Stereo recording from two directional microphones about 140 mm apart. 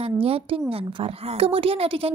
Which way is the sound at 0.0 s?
40° right (ahead or behind).